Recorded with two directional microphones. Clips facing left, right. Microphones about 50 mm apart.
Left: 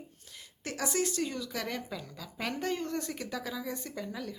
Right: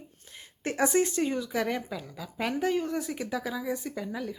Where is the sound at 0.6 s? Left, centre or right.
Right.